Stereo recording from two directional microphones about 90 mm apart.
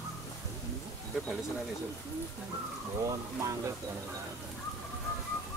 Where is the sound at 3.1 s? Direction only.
40° right (ahead or behind).